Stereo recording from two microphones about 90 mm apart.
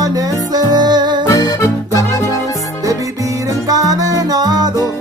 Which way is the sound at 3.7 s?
40° right (ahead or behind).